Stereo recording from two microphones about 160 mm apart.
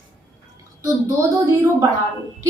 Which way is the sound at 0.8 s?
20° right (ahead or behind).